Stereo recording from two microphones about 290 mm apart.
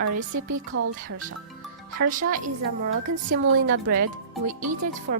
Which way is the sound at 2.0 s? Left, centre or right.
Right.